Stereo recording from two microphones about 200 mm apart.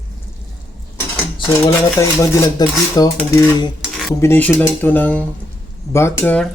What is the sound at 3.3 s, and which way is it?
Cutlery, 20° left (ahead or behind).